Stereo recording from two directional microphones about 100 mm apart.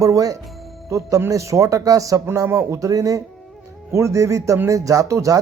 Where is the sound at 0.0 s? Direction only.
35° right (ahead or behind).